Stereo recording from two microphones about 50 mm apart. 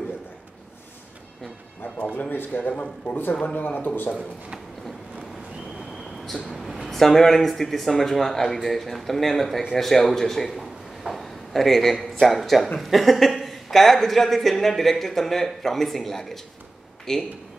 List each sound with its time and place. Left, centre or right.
2.1 s a man's voice: left
5.8 s vehicle: centre
6.9 s a woman's voice: centre